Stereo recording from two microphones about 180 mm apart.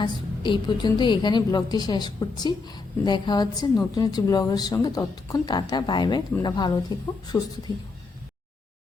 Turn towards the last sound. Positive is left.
turn(degrees=20)  # may be behind; listen again after turning